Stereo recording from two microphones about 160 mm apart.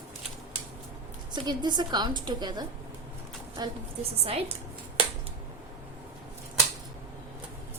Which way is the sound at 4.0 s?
40° right (ahead or behind).